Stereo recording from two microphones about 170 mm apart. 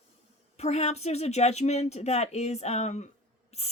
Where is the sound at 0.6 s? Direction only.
40° left (ahead or behind).